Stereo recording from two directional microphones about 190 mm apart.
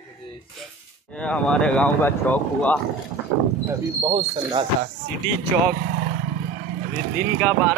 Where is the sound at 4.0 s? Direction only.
25° right (ahead or behind).